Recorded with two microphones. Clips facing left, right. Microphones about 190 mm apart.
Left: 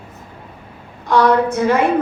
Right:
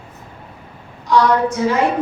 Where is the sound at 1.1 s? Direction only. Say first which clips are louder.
Left 1 dB; 55° left (ahead or behind).